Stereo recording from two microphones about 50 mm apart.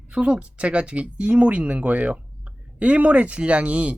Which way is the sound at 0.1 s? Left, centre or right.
Right.